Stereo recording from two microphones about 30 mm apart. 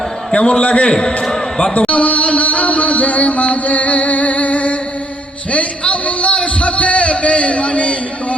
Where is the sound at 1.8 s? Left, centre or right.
Left.